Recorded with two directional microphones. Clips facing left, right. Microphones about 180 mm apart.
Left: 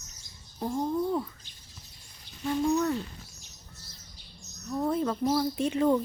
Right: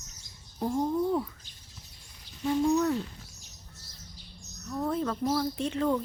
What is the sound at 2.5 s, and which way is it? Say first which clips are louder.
Speech: right 1 dB; 5° right (ahead or behind).